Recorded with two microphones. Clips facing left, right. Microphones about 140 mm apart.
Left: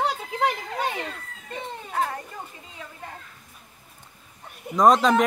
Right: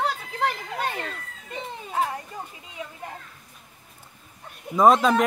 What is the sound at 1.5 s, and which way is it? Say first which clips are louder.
Baby cry: even; 10° right (ahead or behind).